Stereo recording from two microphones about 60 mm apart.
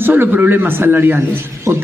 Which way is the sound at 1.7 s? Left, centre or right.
Right.